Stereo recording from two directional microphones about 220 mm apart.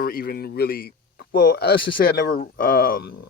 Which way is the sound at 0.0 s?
40° left (ahead or behind).